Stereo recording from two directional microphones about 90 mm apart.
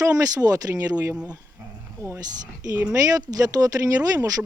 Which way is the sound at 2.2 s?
40° right (ahead or behind).